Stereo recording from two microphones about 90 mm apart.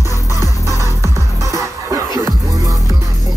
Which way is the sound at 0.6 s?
35° right (ahead or behind).